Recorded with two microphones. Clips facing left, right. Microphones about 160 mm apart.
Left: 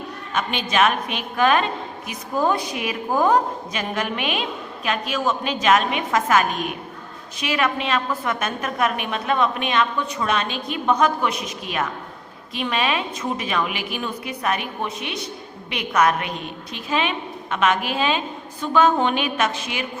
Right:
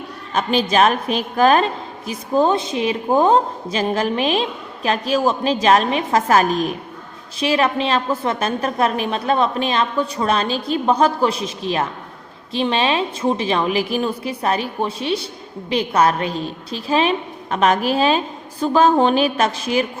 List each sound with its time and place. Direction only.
0.3 s a woman's voice: 35° right (ahead or behind)